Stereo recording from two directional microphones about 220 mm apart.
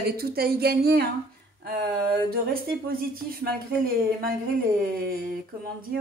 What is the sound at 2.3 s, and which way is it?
Speech, 40° right (ahead or behind).